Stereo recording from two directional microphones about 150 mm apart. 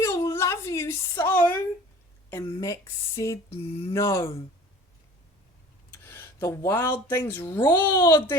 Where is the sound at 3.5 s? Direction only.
40° left (ahead or behind).